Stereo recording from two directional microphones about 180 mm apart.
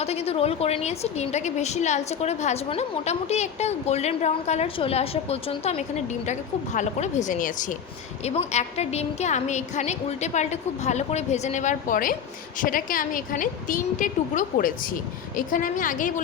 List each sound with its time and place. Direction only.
0.0 s a woman's voice: 35° left (ahead or behind)
8.2 s a woman's voice: 35° left (ahead or behind)